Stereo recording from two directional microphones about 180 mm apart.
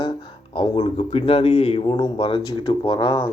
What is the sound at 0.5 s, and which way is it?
Speech, 30° left (ahead or behind).